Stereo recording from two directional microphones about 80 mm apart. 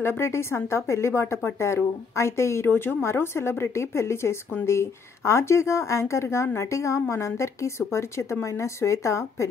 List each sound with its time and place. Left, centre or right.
0.0 s a woman's voice: left